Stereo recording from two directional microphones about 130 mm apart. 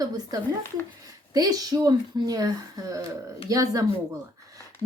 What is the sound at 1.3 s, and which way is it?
A woman's voice, 30° right (ahead or behind).